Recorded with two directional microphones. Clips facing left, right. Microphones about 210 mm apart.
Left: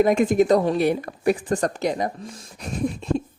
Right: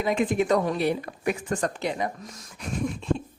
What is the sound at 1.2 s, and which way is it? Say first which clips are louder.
Speech: left 7 dB; 35° left (ahead or behind).